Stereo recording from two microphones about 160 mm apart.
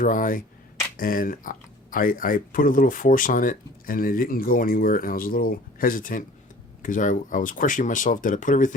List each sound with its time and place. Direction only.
0.0 s speech: 55° left (ahead or behind)